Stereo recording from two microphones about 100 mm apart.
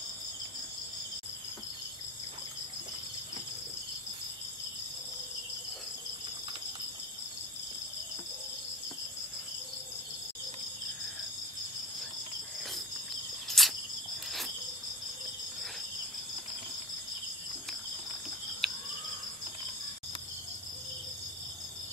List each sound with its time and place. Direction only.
13.5 s cricket: centre (ahead or behind)
18.6 s cricket: 5° left (ahead or behind)